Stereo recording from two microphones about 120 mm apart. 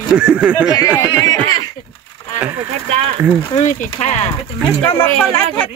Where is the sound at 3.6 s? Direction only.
75° left (ahead or behind).